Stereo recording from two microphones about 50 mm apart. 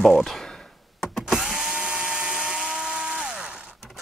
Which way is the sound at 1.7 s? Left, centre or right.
Centre.